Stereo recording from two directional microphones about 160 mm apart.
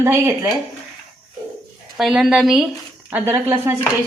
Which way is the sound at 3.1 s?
15° right (ahead or behind).